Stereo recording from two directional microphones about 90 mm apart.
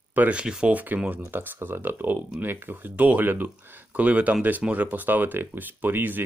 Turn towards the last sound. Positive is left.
turn(degrees=-20)  # may be behind; listen again after turning